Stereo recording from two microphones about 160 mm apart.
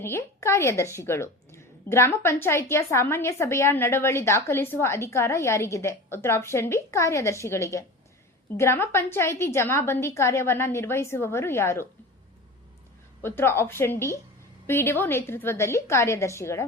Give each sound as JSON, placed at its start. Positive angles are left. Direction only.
{"t": 0.0, "sound": "a woman's voice", "side_deg": 15}
{"t": 13.2, "sound": "a woman's voice", "side_deg": 15}